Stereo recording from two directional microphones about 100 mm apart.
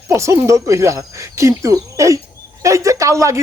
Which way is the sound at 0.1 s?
30° right (ahead or behind).